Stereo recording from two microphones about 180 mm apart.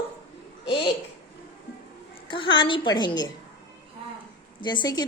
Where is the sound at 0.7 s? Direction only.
30° left (ahead or behind).